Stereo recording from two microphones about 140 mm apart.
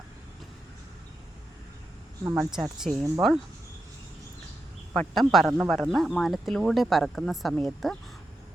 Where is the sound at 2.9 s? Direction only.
55° right (ahead or behind).